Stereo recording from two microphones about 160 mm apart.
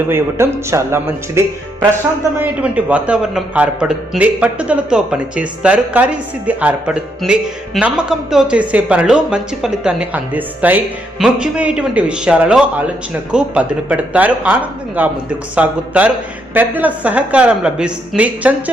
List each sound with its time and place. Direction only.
0.1 s a man's voice: 15° right (ahead or behind)